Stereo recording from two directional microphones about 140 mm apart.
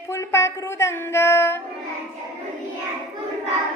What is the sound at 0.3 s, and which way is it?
Child singing, 20° left (ahead or behind).